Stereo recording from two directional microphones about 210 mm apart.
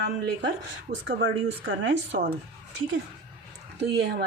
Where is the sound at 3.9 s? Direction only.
50° right (ahead or behind).